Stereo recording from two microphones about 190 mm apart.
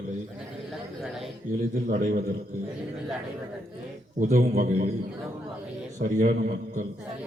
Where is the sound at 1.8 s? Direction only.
45° right (ahead or behind).